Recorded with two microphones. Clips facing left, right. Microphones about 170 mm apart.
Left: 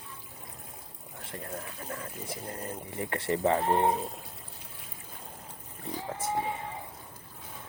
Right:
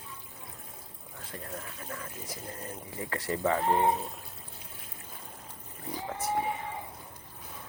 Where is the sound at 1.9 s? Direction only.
35° left (ahead or behind).